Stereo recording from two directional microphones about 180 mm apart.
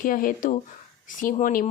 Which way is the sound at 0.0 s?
50° left (ahead or behind).